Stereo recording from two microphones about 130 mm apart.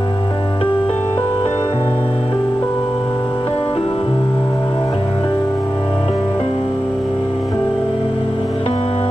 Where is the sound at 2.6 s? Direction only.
35° left (ahead or behind).